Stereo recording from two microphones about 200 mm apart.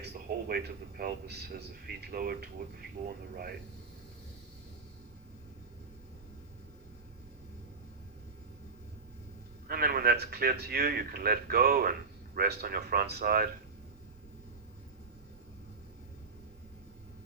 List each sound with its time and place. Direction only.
0.0 s speech: 50° right (ahead or behind)
3.0 s speech: 35° right (ahead or behind)
9.6 s speech: 50° right (ahead or behind)